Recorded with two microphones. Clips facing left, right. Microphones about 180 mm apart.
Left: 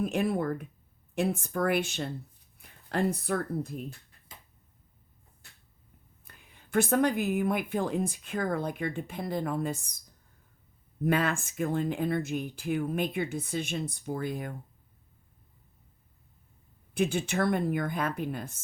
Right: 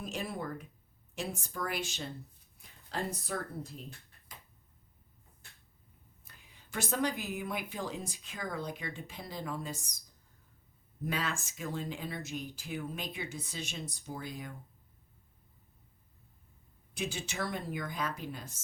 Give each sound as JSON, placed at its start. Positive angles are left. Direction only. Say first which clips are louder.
{"t": 0.0, "sound": "speech", "louder": "left 10 dB", "side_deg": 55}
{"t": 6.2, "sound": "speech", "louder": "left 4 dB", "side_deg": 55}
{"t": 11.0, "sound": "speech", "louder": "left 9 dB", "side_deg": 55}
{"t": 16.9, "sound": "speech", "louder": "left 10 dB", "side_deg": 55}